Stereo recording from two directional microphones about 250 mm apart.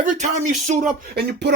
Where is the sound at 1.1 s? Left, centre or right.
Right.